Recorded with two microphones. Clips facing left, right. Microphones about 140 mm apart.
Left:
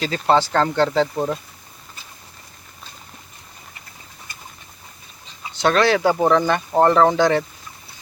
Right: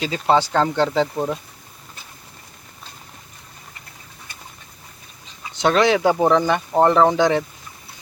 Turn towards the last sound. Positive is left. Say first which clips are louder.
# even
turn(degrees=-15)  # may be behind; listen again after turning